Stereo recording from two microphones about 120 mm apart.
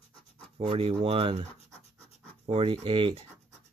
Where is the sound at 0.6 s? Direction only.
60° right (ahead or behind).